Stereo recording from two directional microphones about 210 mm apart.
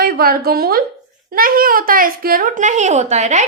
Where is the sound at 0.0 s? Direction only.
45° right (ahead or behind).